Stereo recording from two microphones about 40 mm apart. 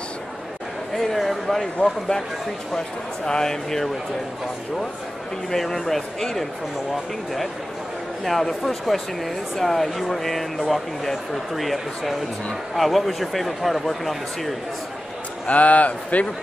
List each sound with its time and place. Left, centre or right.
0.9 s speech: centre
3.3 s speech: centre
5.5 s speech: centre
8.2 s speech: centre
15.4 s a man's voice: left